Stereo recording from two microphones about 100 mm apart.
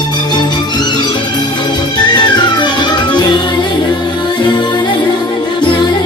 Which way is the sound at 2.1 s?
50° left (ahead or behind).